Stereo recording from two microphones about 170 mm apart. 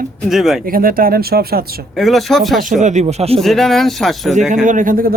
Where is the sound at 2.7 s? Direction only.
45° right (ahead or behind).